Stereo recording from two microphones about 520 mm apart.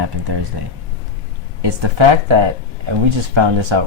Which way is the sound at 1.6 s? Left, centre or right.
Right.